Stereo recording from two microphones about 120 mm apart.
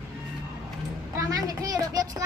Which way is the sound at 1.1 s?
30° right (ahead or behind).